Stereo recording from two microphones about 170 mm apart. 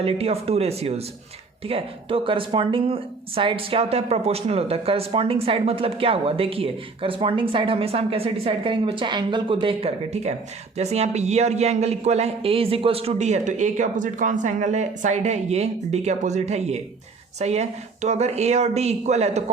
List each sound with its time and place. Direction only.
0.0 s speech: 35° right (ahead or behind)